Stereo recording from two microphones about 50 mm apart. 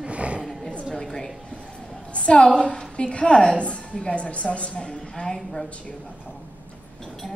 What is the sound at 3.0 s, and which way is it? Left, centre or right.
A woman's voice, left.